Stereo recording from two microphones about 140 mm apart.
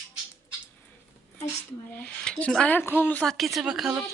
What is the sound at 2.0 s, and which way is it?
Speech, 10° left (ahead or behind).